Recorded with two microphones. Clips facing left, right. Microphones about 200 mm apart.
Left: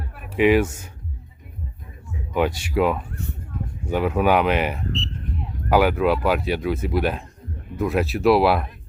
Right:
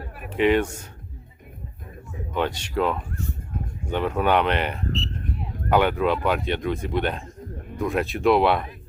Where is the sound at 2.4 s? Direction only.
10° left (ahead or behind).